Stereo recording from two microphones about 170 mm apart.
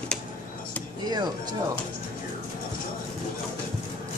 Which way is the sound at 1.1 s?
25° right (ahead or behind).